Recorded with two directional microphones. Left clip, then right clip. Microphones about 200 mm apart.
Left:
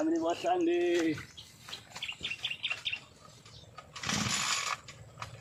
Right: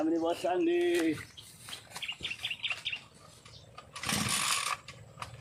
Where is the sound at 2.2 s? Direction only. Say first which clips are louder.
Left 1 dB; 30° right (ahead or behind).